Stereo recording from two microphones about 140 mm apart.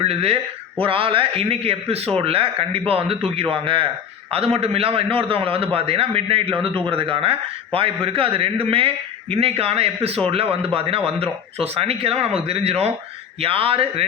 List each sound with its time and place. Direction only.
0.0 s a man's voice: 45° right (ahead or behind)